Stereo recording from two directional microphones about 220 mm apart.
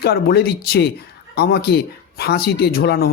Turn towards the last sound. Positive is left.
turn(degrees=45)  # may be behind; listen again after turning